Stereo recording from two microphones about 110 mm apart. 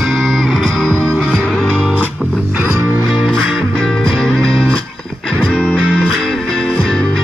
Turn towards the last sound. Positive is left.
turn(degrees=5)  # may be behind; listen again after turning